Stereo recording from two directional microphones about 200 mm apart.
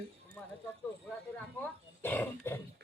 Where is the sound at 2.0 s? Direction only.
10° left (ahead or behind).